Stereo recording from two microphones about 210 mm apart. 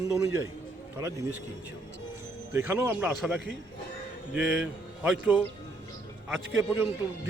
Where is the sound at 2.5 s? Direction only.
10° right (ahead or behind).